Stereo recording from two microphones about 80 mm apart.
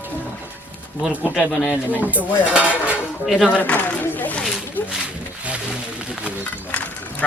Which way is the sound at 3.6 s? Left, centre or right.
Left.